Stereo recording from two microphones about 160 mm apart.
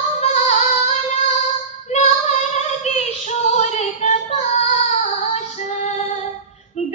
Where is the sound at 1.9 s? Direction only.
45° left (ahead or behind).